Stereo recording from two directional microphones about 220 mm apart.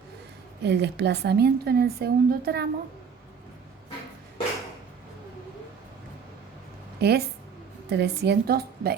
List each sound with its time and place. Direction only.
0.6 s a woman's voice: 50° right (ahead or behind)
7.0 s a woman's voice: 45° right (ahead or behind)